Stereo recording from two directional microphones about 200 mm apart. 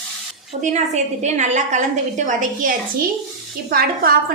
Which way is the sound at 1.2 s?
35° right (ahead or behind).